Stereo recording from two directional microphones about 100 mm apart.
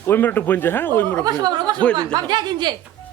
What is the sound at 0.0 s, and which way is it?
Speech, 20° left (ahead or behind).